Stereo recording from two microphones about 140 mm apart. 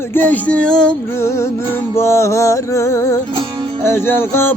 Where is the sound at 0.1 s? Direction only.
10° left (ahead or behind).